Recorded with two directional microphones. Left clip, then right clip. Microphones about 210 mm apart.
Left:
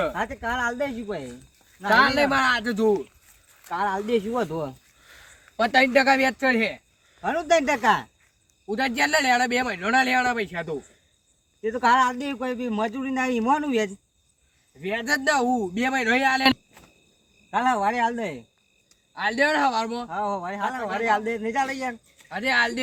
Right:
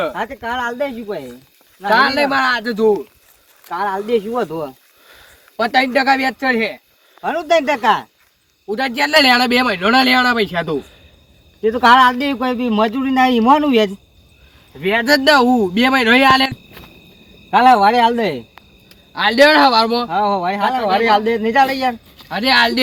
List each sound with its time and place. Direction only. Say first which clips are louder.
0.1 s a man's voice: right 5 dB; 5° left (ahead or behind)
1.9 s speech: right 5 dB; 15° left (ahead or behind)
3.7 s a man's voice: right 6 dB; centre (ahead or behind)
5.0 s a sound: right 5 dB; 10° right (ahead or behind)
5.5 s speech: right 4 dB; 25° left (ahead or behind)
7.2 s a man's voice: right 6 dB; 10° left (ahead or behind)
8.6 s speech: right 6 dB; 20° left (ahead or behind)
11.6 s a man's voice: right 10 dB; centre (ahead or behind)
14.8 s speech: right 11 dB; 15° left (ahead or behind)
17.5 s a man's voice: right 12 dB; centre (ahead or behind)
19.1 s speech: right 12 dB; 15° left (ahead or behind)
20.1 s a man's voice: right 11 dB; centre (ahead or behind)
22.3 s speech: right 9 dB; 15° left (ahead or behind)